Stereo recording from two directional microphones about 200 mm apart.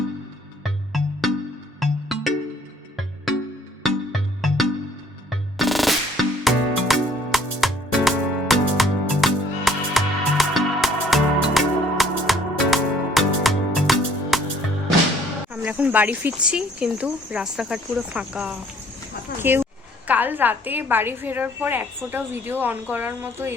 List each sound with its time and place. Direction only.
0.6 s music: centre (ahead or behind)
3.8 s music: centre (ahead or behind)
15.5 s a woman's voice: 10° right (ahead or behind)